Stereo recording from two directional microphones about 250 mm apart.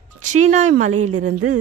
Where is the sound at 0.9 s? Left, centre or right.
Right.